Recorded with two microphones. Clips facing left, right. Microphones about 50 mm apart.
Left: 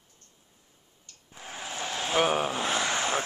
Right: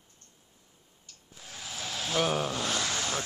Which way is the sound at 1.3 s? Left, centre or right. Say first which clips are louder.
Left 6 dB; left.